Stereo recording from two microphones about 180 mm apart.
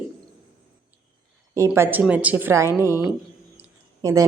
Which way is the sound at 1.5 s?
15° right (ahead or behind).